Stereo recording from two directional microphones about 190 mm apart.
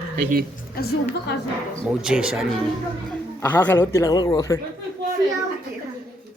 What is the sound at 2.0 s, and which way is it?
Speech, 5° right (ahead or behind).